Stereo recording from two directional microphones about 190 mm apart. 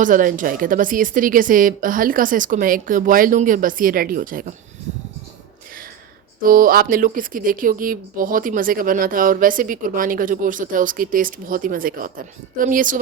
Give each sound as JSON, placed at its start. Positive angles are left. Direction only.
{"t": 0.0, "sound": "speech", "side_deg": -45}
{"t": 6.4, "sound": "speech", "side_deg": -45}